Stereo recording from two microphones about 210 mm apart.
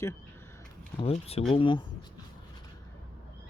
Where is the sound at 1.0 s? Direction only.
30° left (ahead or behind).